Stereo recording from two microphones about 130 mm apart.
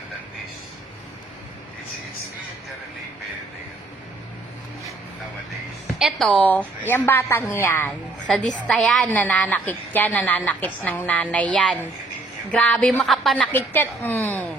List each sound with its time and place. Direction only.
6.0 s a woman's voice: centre (ahead or behind)
6.4 s a woman's voice: 15° left (ahead or behind)
7.9 s a woman's voice: 5° left (ahead or behind)